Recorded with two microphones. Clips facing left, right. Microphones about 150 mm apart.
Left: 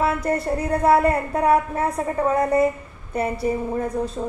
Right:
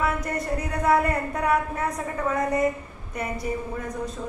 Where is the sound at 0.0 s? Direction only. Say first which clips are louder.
Left 5 dB; 30° left (ahead or behind).